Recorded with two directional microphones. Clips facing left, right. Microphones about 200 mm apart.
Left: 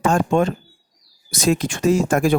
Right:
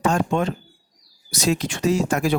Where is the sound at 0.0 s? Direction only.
50° left (ahead or behind).